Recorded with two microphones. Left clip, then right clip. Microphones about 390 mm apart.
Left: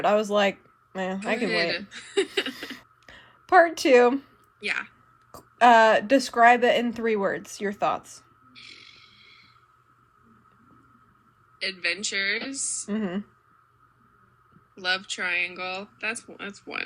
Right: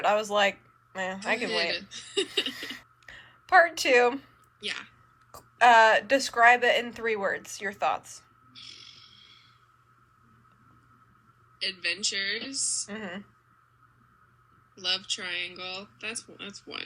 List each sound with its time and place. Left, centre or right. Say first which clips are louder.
0.0 s speech: left 2 dB; centre
1.9 s a woman's voice: left 4 dB; centre
2.5 s a sound: left 1 dB; centre
5.3 s speech: left 2 dB; centre
8.5 s a sound: even; centre
11.6 s a woman's voice: left 2 dB; centre
14.9 s a woman's voice: left 5 dB; centre
16.7 s speech: left 6 dB; centre